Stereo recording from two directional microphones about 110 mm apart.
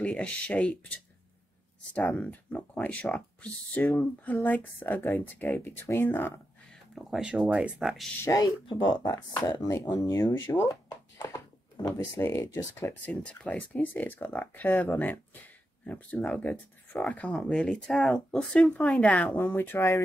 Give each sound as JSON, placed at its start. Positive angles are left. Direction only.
{"t": 0.0, "sound": "speech", "side_deg": 10}
{"t": 2.0, "sound": "speech", "side_deg": 10}
{"t": 7.0, "sound": "speech", "side_deg": -5}
{"t": 8.2, "sound": "speech", "side_deg": 30}
{"t": 8.6, "sound": "speech", "side_deg": 45}
{"t": 9.0, "sound": "speech", "side_deg": 35}
{"t": 11.3, "sound": "a sound", "side_deg": 35}
{"t": 12.0, "sound": "speech", "side_deg": 25}
{"t": 13.0, "sound": "speech", "side_deg": 10}